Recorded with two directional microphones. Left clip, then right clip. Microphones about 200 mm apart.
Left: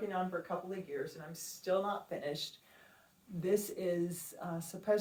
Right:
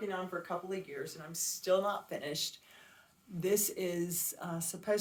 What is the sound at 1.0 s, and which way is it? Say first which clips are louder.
Speech: right 3 dB; 40° right (ahead or behind).